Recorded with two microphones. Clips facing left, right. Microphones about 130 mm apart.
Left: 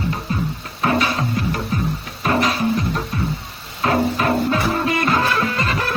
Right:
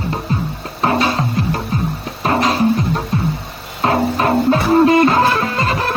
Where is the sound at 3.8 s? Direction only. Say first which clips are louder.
Right 3 dB; 30° right (ahead or behind).